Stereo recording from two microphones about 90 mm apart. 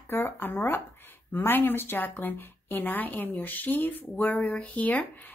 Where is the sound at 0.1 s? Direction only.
25° left (ahead or behind).